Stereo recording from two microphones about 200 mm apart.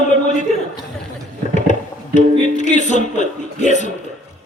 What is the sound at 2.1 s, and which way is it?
A man's voice, 35° left (ahead or behind).